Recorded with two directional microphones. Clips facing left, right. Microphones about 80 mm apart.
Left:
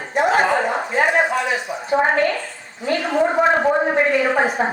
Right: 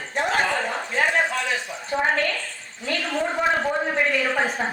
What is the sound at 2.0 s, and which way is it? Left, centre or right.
A woman's voice, left.